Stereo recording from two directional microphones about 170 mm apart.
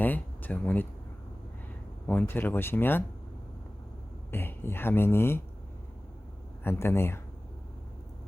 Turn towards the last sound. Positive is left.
turn(degrees=15)  # may be behind; listen again after turning